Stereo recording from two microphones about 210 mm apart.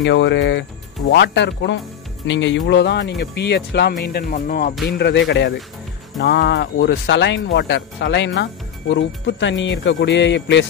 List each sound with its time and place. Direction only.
0.0 s speech: 55° left (ahead or behind)